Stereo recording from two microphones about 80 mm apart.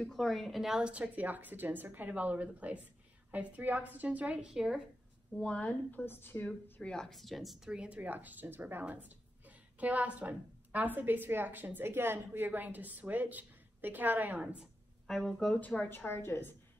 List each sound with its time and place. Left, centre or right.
0.0 s a woman's voice: centre
5.3 s a woman's voice: centre
6.4 s speech: centre
7.7 s a woman's voice: centre
15.0 s speech: centre
15.5 s a woman's voice: centre
16.1 s a woman's voice: left